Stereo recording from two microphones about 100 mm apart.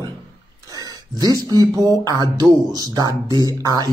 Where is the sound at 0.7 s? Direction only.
40° right (ahead or behind).